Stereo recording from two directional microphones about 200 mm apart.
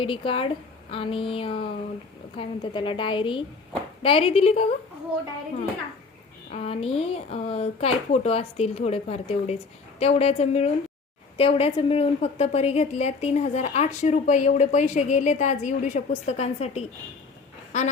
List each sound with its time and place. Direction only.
0.0 s a woman's voice: 25° left (ahead or behind)
6.5 s a woman's voice: 30° left (ahead or behind)